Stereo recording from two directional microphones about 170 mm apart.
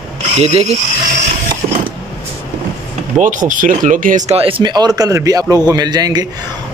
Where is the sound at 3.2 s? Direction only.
50° right (ahead or behind).